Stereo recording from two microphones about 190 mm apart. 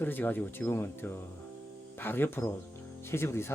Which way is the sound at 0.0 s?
10° left (ahead or behind).